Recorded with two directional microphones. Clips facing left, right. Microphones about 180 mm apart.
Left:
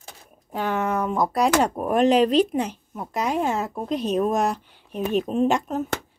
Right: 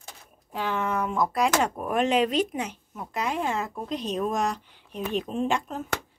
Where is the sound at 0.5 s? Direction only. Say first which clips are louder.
Left 4 dB; 50° left (ahead or behind).